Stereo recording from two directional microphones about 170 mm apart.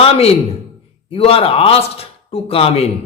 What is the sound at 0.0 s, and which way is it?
A man's voice, 35° left (ahead or behind).